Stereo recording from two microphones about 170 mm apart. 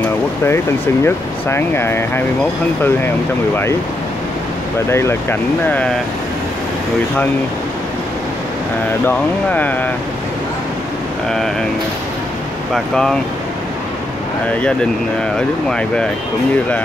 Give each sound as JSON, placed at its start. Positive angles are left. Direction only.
{"t": 1.0, "sound": "speech", "side_deg": 15}
{"t": 4.9, "sound": "speech", "side_deg": 15}
{"t": 9.0, "sound": "speech", "side_deg": 10}
{"t": 12.7, "sound": "speech", "side_deg": 5}
{"t": 15.3, "sound": "speech", "side_deg": 5}